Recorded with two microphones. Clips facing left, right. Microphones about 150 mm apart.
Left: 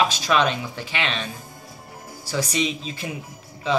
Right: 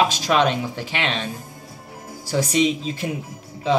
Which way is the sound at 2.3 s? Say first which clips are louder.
Right 5 dB; 25° right (ahead or behind).